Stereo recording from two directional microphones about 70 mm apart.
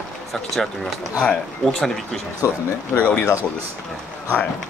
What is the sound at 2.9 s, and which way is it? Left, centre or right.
Speech, centre.